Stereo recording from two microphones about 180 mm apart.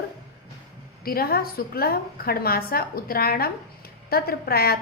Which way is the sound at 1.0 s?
55° left (ahead or behind).